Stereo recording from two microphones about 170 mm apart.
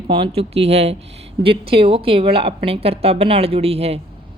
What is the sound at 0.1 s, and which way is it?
A woman's voice, 35° right (ahead or behind).